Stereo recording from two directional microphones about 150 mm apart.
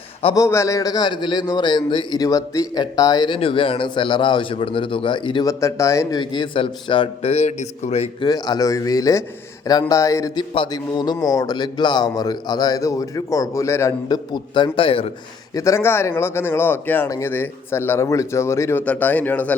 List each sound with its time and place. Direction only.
0.3 s a man's voice: 20° left (ahead or behind); by 8.1 s 45° left (ahead or behind)
8.2 s speech: 25° left (ahead or behind)
10.5 s speech: 30° left (ahead or behind)
15.5 s a man's voice: 20° left (ahead or behind)